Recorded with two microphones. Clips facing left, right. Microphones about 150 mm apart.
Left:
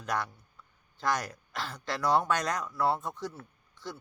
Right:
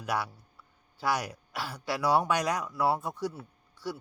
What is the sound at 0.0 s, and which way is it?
Speech, 10° right (ahead or behind).